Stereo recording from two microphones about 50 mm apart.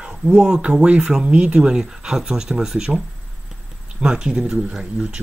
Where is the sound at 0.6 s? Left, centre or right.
Right.